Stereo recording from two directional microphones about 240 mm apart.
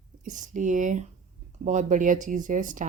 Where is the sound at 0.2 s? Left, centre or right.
Right.